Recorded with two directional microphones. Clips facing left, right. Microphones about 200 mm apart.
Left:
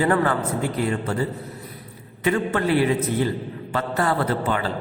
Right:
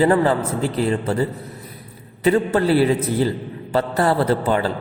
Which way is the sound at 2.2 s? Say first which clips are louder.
Right 5 dB; 35° right (ahead or behind).